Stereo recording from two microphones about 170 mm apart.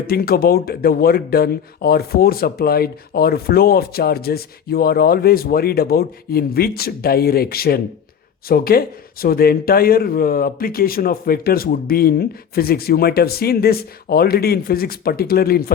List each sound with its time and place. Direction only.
0.1 s speech: 60° left (ahead or behind)